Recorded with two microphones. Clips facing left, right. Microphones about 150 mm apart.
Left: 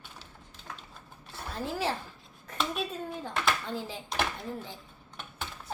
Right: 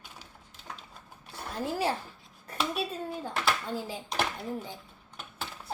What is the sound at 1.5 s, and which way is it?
Speech, 10° right (ahead or behind).